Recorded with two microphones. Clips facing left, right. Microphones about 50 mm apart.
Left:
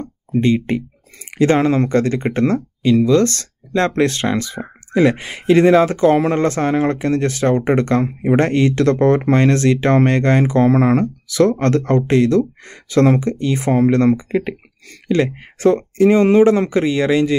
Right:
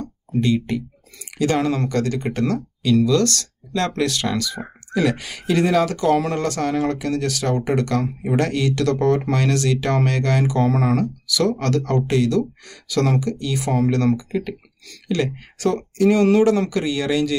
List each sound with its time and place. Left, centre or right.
0.4 s speech: left